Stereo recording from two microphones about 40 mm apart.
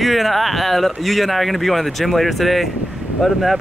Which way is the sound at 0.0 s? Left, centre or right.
Centre.